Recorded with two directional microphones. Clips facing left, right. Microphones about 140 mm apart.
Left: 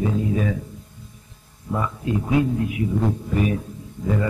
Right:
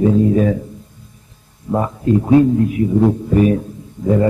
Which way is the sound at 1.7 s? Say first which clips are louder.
Right 8 dB; 40° right (ahead or behind).